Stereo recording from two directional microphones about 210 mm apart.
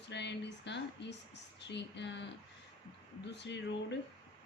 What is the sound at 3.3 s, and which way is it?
Speech, 55° left (ahead or behind).